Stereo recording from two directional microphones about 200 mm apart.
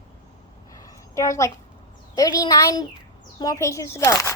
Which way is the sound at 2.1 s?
20° left (ahead or behind).